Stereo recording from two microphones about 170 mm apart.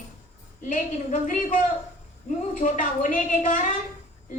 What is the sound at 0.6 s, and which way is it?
A woman's voice, 50° left (ahead or behind).